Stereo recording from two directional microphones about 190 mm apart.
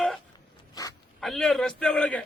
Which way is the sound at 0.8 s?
20° left (ahead or behind).